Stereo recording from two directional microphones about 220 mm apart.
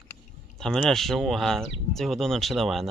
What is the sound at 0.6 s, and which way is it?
Speech, centre (ahead or behind).